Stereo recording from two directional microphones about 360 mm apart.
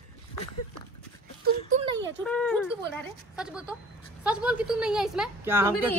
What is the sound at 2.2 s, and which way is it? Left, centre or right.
Speech, centre.